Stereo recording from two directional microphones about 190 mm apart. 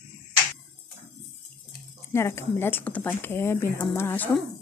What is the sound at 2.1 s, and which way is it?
Speech, 15° left (ahead or behind).